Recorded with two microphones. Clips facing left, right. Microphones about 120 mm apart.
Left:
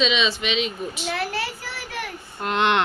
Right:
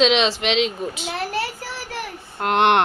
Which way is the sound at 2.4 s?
65° right (ahead or behind).